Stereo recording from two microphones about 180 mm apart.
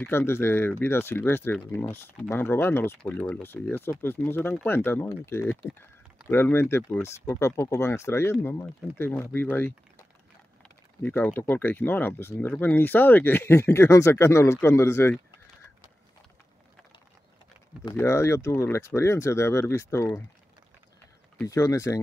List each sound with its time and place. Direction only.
0.0 s speech: 15° left (ahead or behind)
11.0 s speech: 10° left (ahead or behind)
17.8 s speech: 15° left (ahead or behind)
21.5 s speech: 20° left (ahead or behind)